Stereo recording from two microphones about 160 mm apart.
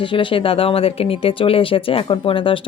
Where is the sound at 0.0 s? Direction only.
30° left (ahead or behind).